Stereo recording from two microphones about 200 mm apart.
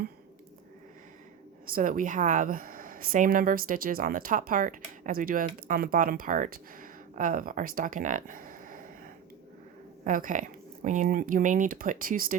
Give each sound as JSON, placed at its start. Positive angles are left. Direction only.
{"t": 1.7, "sound": "speech", "side_deg": -40}
{"t": 10.0, "sound": "speech", "side_deg": -40}